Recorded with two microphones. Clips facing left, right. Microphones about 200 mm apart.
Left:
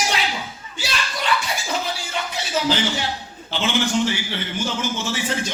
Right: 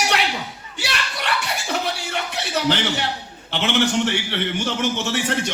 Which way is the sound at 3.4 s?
65° right (ahead or behind).